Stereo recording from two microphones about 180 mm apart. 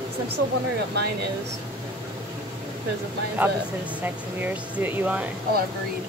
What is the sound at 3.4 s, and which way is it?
Speech, 10° right (ahead or behind).